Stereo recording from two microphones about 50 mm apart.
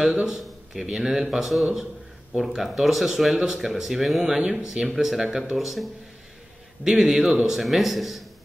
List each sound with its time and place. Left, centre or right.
0.1 s speech: centre
4.2 s speech: centre